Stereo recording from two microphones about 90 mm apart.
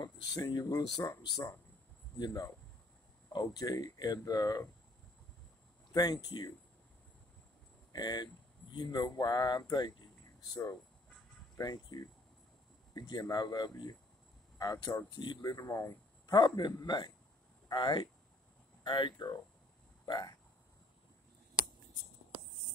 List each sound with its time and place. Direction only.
0.0 s speech: 50° left (ahead or behind)
2.1 s speech: 45° left (ahead or behind)
5.9 s speech: 50° left (ahead or behind)
7.9 s speech: 50° left (ahead or behind)
15.0 s speech: 55° left (ahead or behind)
15.5 s speech: 40° left (ahead or behind)
16.3 s speech: 50° left (ahead or behind)